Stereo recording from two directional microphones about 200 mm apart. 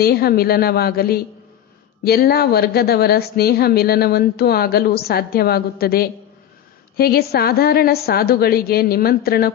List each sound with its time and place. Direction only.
0.0 s a woman's voice: 50° left (ahead or behind)